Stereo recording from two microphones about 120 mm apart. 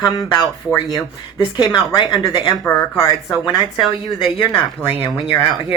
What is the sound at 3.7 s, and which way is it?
Speech, centre (ahead or behind).